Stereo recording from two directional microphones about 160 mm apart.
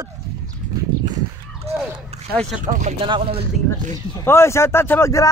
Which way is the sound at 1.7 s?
40° right (ahead or behind).